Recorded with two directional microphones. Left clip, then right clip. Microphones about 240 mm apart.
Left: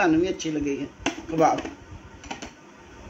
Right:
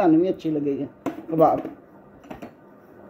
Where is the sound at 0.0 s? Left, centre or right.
Right.